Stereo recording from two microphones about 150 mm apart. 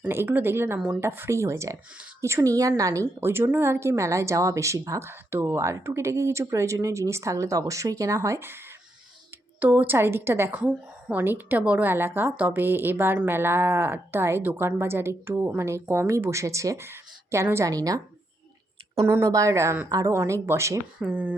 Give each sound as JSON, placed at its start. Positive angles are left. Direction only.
{"t": 0.0, "sound": "a woman's voice", "side_deg": -15}
{"t": 19.0, "sound": "a woman's voice", "side_deg": -20}